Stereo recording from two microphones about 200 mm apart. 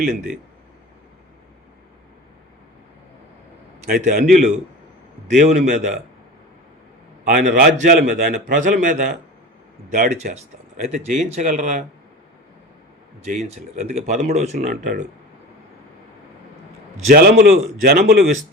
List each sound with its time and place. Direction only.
3.8 s speech: 50° right (ahead or behind)
7.3 s a man's voice: 40° right (ahead or behind)
13.2 s speech: 35° right (ahead or behind)
17.1 s a man's voice: 50° right (ahead or behind)